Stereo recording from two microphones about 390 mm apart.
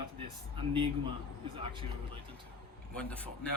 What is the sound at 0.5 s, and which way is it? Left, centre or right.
Speech, centre.